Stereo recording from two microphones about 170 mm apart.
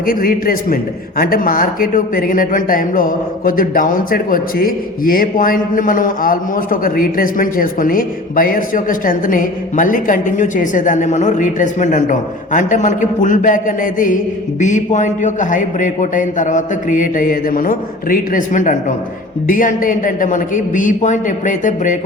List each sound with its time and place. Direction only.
0.0 s a man's voice: 55° left (ahead or behind)